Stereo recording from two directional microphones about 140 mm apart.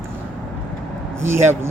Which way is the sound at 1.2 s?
15° right (ahead or behind).